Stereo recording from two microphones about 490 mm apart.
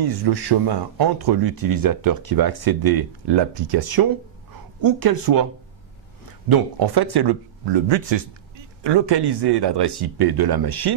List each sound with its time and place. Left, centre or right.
0.0 s speech: right
6.5 s speech: right